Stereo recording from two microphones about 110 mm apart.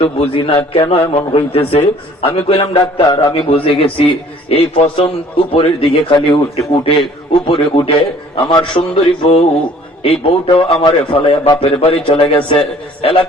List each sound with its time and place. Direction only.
0.0 s a man's voice: 60° left (ahead or behind)
3.0 s a man's voice: 40° left (ahead or behind)
3.3 s a man's voice: 60° left (ahead or behind)